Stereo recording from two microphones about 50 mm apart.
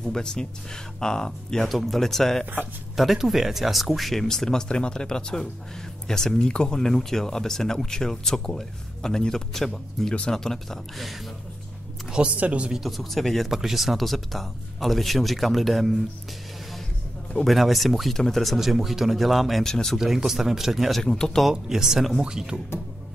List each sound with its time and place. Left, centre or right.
0.0 s speech: centre
1.7 s speech: centre
3.0 s speech: centre
12.4 s speech: right
12.7 s speech: centre
13.5 s speech: centre
17.5 s speech: centre
19.6 s speech: centre
20.0 s speech: centre
21.0 s speech: centre
21.5 s speech: centre